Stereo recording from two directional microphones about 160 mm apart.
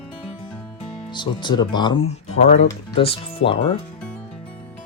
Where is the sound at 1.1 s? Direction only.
30° left (ahead or behind).